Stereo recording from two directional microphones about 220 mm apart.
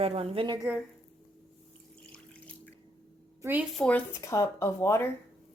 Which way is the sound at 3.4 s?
10° right (ahead or behind).